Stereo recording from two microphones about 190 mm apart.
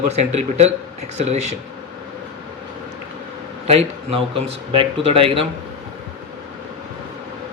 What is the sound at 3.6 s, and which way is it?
Speech, 35° right (ahead or behind).